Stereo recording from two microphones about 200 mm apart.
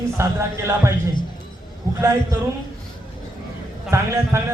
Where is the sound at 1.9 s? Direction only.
15° right (ahead or behind).